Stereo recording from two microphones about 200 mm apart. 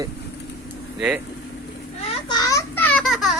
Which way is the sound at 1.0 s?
5° right (ahead or behind).